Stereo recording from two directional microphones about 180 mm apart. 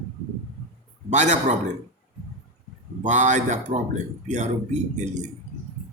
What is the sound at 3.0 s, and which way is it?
A man's voice, 40° right (ahead or behind).